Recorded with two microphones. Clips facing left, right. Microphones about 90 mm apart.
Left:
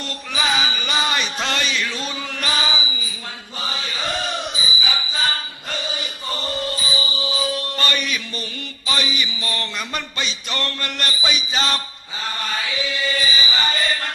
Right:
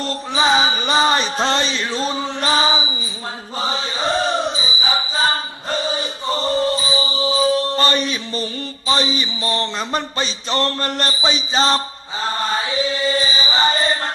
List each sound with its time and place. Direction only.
0.0 s chant: 30° right (ahead or behind)